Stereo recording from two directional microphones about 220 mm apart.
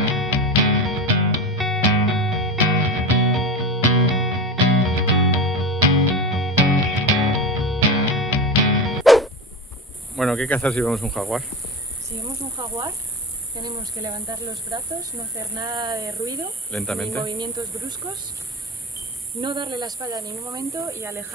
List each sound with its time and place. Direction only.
0.1 s music: centre (ahead or behind)
10.1 s speech: centre (ahead or behind)
12.6 s speech: 20° right (ahead or behind)
16.7 s speech: centre (ahead or behind)
17.2 s speech: 25° right (ahead or behind)
19.4 s speech: 20° right (ahead or behind)